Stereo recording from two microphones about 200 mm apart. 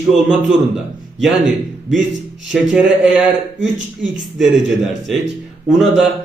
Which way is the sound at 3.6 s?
65° right (ahead or behind).